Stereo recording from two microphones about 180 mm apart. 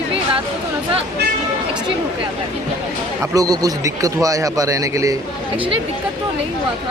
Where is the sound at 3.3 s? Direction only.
20° right (ahead or behind).